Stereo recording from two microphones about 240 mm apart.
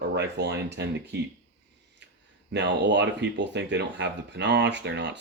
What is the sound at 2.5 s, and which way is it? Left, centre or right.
Speech, right.